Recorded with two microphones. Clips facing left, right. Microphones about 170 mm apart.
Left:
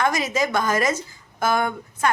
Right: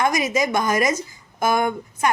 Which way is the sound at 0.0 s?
15° right (ahead or behind).